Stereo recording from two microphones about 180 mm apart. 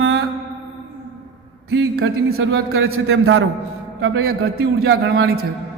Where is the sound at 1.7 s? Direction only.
80° right.